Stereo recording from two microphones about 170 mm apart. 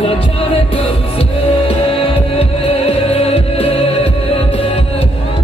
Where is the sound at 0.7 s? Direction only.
35° left (ahead or behind).